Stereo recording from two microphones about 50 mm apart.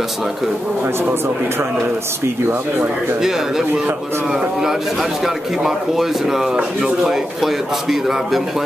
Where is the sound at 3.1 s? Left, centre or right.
Centre.